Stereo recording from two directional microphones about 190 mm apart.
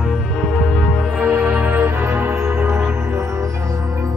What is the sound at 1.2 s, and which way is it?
Music, 10° right (ahead or behind).